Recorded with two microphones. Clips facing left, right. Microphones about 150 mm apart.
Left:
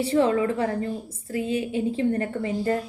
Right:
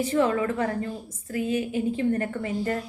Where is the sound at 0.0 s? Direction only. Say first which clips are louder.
Left 2 dB; 30° left (ahead or behind).